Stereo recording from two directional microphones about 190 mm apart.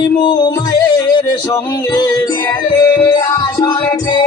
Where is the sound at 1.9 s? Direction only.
20° left (ahead or behind).